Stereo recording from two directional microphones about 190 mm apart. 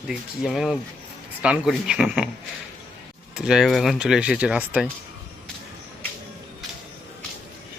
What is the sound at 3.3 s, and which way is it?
Speech, 5° right (ahead or behind).